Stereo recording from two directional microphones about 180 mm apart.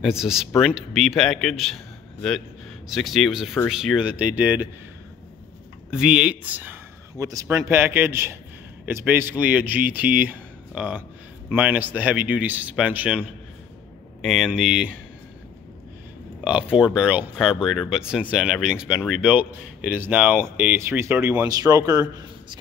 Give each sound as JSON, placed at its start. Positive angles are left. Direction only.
{"t": 0.0, "sound": "speech", "side_deg": -5}
{"t": 2.9, "sound": "speech", "side_deg": 0}
{"t": 5.9, "sound": "speech", "side_deg": -5}
{"t": 16.7, "sound": "a man's voice", "side_deg": -5}